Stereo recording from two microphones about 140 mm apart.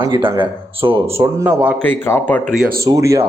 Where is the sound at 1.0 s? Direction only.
20° right (ahead or behind).